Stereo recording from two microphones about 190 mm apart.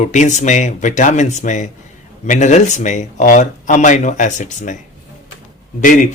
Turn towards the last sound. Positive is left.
turn(degrees=40)  # may be behind; listen again after turning